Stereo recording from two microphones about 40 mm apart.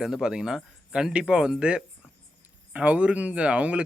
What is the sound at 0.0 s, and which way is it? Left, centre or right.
Speech, centre.